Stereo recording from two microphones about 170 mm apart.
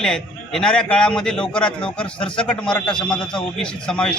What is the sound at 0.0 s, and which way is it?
A man's voice, 5° left (ahead or behind).